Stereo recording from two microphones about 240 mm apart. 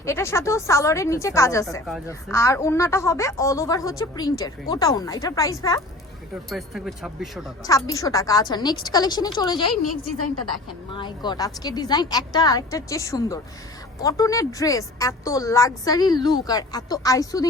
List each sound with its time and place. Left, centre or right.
0.0 s a woman's voice: centre
6.5 s speech: centre
7.6 s a woman's voice: centre
10.9 s a woman's voice: centre